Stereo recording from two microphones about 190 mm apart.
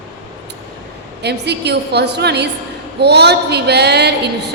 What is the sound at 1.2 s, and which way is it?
A woman's voice, 60° right (ahead or behind).